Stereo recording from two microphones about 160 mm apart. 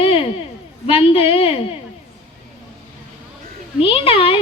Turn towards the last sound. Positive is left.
turn(degrees=35)  # may be behind; listen again after turning